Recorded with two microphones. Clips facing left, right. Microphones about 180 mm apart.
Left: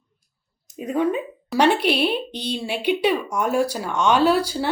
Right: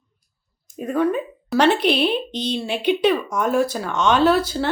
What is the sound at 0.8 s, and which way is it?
Speech, 15° left (ahead or behind).